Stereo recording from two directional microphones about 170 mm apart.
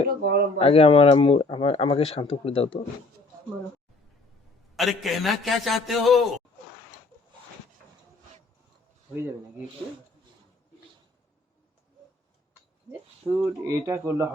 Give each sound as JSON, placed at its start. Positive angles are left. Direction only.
{"t": 0.1, "sound": "speech", "side_deg": -65}
{"t": 0.6, "sound": "speech", "side_deg": 35}
{"t": 4.8, "sound": "a man's voice", "side_deg": 0}
{"t": 13.2, "sound": "a man's voice", "side_deg": 5}
{"t": 13.8, "sound": "speech", "side_deg": -15}